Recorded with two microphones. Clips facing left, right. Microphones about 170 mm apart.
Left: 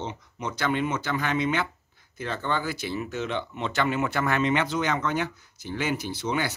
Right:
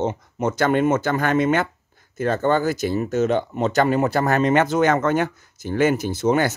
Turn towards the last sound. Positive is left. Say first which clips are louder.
# right 9 dB
turn(degrees=-45)  # may be behind; listen again after turning